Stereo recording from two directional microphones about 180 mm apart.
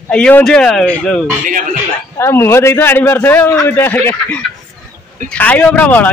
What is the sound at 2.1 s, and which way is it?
Speech, 15° left (ahead or behind).